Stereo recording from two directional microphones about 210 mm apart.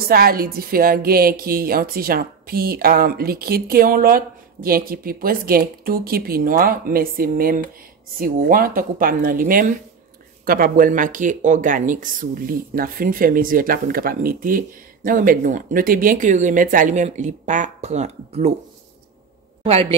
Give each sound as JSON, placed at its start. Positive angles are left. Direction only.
{"t": 0.0, "sound": "speech", "side_deg": -45}
{"t": 19.6, "sound": "a woman's voice", "side_deg": -25}